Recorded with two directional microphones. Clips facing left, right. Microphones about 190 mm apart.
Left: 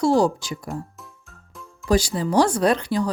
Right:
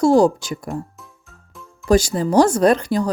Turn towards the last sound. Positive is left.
turn(degrees=-45)  # may be behind; listen again after turning